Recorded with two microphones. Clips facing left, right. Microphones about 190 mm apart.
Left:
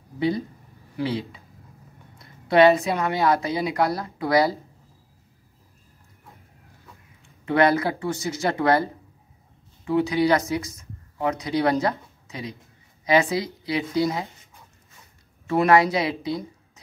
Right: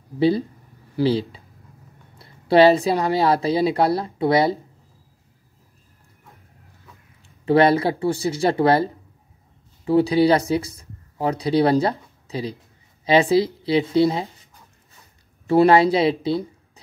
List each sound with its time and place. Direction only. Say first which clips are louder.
0.9 s a woman's voice: right 7 dB; 30° right (ahead or behind)
7.4 s a woman's voice: right 4 dB; 30° right (ahead or behind)
9.8 s speech: right 4 dB; 35° right (ahead or behind)